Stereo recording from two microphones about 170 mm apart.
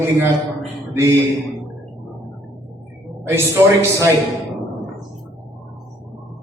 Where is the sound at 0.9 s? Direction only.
15° right (ahead or behind).